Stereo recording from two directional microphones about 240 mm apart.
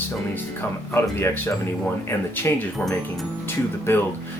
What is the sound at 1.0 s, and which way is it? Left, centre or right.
Speech, centre.